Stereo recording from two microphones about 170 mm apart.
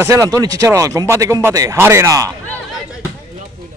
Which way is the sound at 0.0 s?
15° right (ahead or behind).